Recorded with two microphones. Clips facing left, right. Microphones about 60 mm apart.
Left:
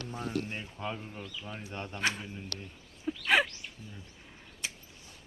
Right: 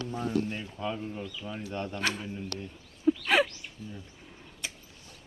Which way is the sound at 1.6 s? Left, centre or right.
Centre.